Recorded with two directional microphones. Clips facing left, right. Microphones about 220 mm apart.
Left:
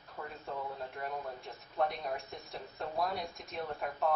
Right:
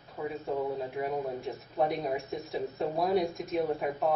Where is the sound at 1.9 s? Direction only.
Centre (ahead or behind).